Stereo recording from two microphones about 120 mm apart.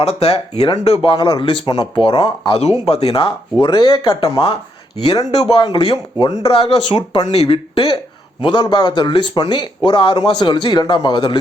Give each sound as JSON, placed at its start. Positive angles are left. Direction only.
{"t": 0.0, "sound": "speech", "side_deg": 60}
{"t": 2.5, "sound": "speech", "side_deg": 60}
{"t": 4.3, "sound": "speech", "side_deg": 55}